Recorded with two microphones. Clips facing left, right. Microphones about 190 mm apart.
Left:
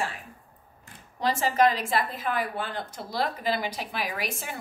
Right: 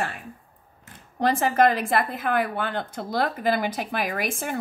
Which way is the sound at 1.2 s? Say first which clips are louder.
Right 3 dB; 55° right (ahead or behind).